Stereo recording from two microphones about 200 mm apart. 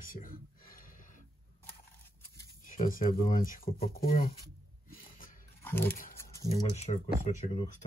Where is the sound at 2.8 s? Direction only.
45° left (ahead or behind).